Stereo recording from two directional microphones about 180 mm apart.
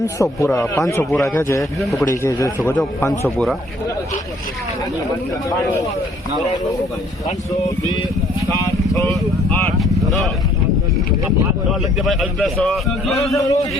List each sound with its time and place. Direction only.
0.0 s a man's voice: 15° left (ahead or behind)
1.8 s a man's voice: centre (ahead or behind)
2.0 s a man's voice: 15° left (ahead or behind)
8.4 s a man's voice: 15° left (ahead or behind)
11.7 s a man's voice: centre (ahead or behind)
13.3 s a man's voice: 20° left (ahead or behind)